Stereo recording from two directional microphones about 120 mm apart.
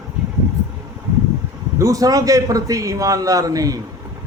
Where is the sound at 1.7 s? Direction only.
25° right (ahead or behind).